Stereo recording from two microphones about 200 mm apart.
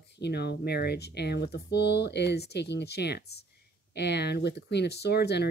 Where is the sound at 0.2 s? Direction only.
55° left (ahead or behind).